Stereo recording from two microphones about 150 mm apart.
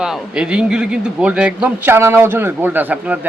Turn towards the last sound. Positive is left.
turn(degrees=-10)  # may be behind; listen again after turning